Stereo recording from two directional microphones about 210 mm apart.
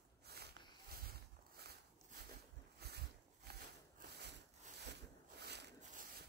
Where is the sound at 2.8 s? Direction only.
50° right (ahead or behind).